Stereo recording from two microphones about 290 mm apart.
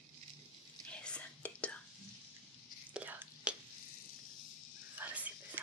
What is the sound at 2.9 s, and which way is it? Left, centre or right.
Whispering, centre.